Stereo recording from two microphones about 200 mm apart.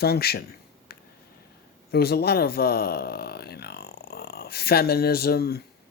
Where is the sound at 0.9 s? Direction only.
50° left (ahead or behind).